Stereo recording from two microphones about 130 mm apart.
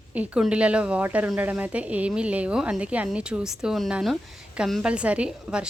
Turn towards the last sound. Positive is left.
turn(degrees=-10)  # may be behind; listen again after turning